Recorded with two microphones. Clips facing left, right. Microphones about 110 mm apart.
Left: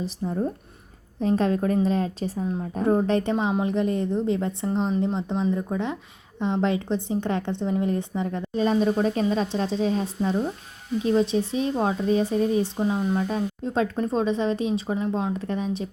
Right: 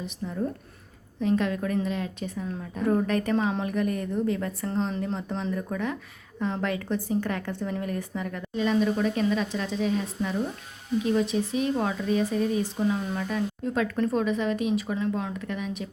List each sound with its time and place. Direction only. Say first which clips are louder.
0.0 s a woman's voice: left 4 dB; 35° left (ahead or behind)